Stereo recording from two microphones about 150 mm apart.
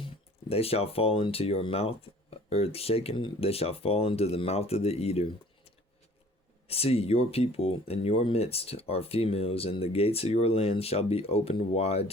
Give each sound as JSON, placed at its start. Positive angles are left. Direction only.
{"t": 0.0, "sound": "speech", "side_deg": 40}